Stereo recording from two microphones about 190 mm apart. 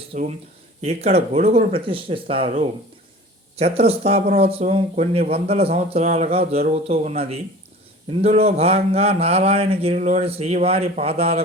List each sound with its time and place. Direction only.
0.1 s speech: 35° right (ahead or behind)